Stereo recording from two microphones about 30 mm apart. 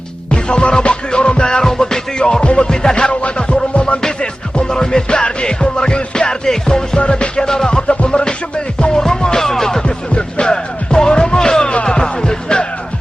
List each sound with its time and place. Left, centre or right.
0.3 s music: left
3.1 s music: left
4.7 s music: left
5.1 s music: left; by 9.8 s centre
9.8 s music: left